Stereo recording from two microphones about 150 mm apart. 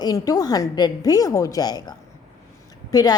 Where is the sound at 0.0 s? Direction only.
25° left (ahead or behind).